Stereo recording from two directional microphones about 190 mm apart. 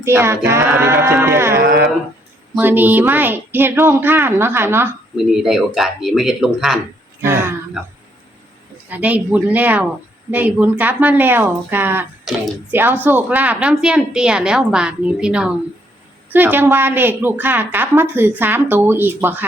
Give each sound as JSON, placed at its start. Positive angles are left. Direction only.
{"t": 0.0, "sound": "a woman's voice", "side_deg": -15}
{"t": 1.6, "sound": "speech", "side_deg": -55}
{"t": 2.6, "sound": "a woman's voice", "side_deg": -10}
{"t": 7.2, "sound": "speech", "side_deg": -15}
{"t": 8.9, "sound": "a woman's voice", "side_deg": -5}
{"t": 12.3, "sound": "a woman's voice", "side_deg": 0}